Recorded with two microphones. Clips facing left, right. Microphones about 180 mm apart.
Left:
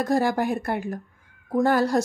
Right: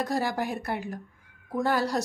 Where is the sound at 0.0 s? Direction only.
50° left (ahead or behind).